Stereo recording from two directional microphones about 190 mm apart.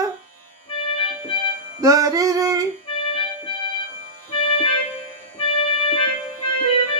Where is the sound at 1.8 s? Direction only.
15° right (ahead or behind).